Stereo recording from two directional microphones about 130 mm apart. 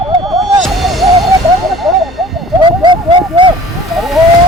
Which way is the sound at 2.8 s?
40° right (ahead or behind).